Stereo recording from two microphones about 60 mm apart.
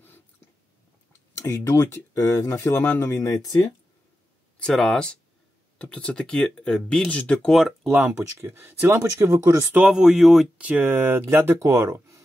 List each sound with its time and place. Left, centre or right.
1.4 s speech: left
2.7 s speech: left
3.0 s speech: left
4.6 s speech: centre
7.5 s speech: centre
8.1 s speech: right
9.8 s speech: centre
10.6 s speech: right
11.6 s speech: right